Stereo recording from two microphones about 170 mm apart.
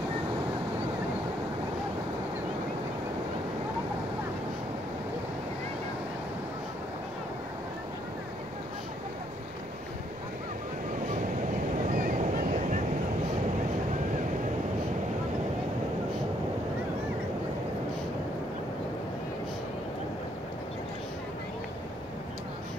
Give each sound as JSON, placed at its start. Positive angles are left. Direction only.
{"t": 11.9, "sound": "boat", "side_deg": -50}